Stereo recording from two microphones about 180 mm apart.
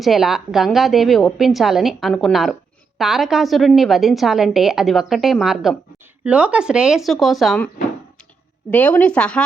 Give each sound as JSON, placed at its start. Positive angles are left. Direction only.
{"t": 0.0, "sound": "a woman's voice", "side_deg": 0}
{"t": 8.7, "sound": "speech", "side_deg": 10}